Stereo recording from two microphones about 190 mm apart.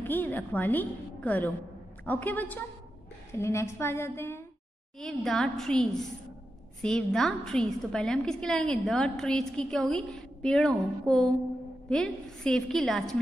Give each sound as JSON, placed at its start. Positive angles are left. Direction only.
{"t": 0.0, "sound": "a woman's voice", "side_deg": 10}
{"t": 4.9, "sound": "a woman's voice", "side_deg": 0}